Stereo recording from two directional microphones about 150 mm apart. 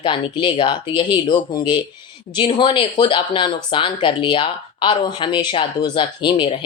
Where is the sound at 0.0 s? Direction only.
30° left (ahead or behind).